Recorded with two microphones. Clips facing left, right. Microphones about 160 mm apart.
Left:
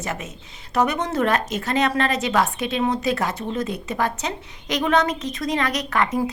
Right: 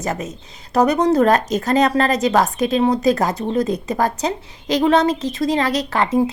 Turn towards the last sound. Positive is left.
turn(degrees=-30)  # may be behind; listen again after turning